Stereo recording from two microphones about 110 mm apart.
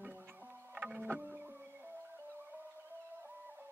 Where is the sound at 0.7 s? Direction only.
15° right (ahead or behind).